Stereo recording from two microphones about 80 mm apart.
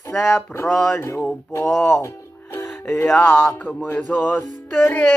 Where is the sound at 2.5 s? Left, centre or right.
Left.